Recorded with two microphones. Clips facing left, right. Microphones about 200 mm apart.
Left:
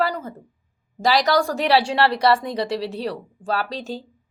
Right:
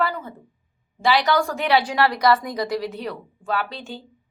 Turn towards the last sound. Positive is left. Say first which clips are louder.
# left 2 dB
turn(degrees=35)  # may be behind; listen again after turning